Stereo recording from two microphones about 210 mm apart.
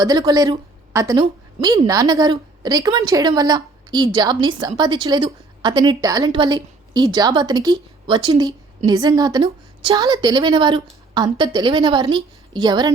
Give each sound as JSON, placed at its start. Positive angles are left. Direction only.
{"t": 0.0, "sound": "a woman's voice", "side_deg": -15}